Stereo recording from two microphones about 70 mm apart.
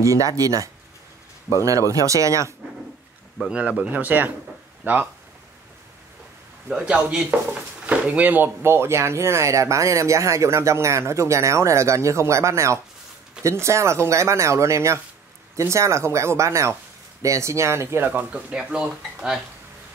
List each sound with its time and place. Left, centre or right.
0.0 s speech: right
3.3 s a man's voice: centre
6.8 s speech: centre; by 18.0 s right
18.0 s speech: right